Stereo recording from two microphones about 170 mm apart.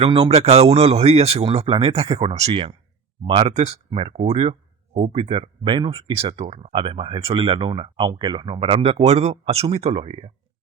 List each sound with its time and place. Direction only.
0.0 s speech: 35° right (ahead or behind)